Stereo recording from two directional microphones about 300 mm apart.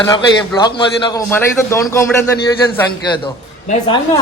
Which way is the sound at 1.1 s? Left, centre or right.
Centre.